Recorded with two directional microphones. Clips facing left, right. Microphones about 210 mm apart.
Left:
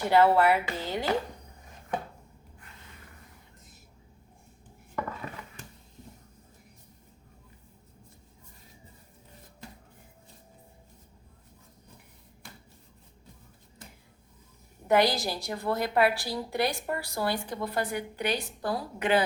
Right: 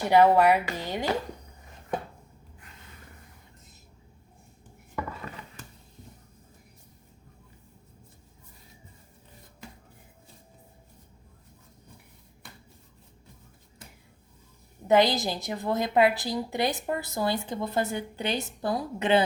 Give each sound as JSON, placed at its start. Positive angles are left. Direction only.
{"t": 0.1, "sound": "speech", "side_deg": -15}
{"t": 14.8, "sound": "a woman's voice", "side_deg": -20}